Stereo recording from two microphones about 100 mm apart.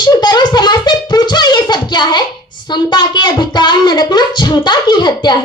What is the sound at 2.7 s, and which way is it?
Speech, 50° left (ahead or behind).